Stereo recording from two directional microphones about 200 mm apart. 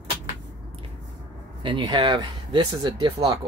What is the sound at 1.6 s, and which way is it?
Speech, 25° right (ahead or behind).